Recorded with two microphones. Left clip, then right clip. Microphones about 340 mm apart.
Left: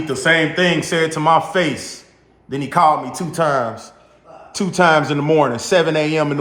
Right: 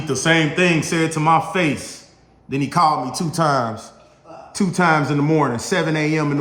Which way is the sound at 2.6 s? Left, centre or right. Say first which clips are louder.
Left 3 dB; centre.